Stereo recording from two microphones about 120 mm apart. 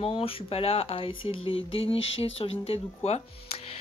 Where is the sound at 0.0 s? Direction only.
50° left (ahead or behind).